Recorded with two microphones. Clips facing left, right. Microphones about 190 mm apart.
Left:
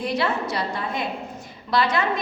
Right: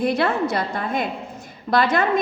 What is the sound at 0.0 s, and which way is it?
A woman's voice, 55° right (ahead or behind).